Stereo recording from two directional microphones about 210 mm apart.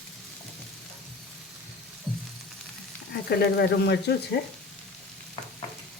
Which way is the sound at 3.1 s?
50° left (ahead or behind).